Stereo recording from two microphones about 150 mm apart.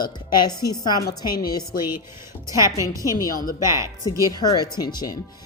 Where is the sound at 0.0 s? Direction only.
25° left (ahead or behind).